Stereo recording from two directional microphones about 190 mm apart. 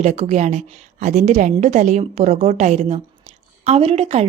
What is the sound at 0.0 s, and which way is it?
A woman's voice, 35° right (ahead or behind).